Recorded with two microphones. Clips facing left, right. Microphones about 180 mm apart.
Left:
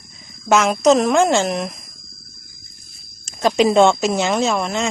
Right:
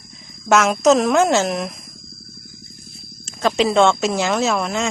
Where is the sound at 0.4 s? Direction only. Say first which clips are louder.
Even; centre (ahead or behind).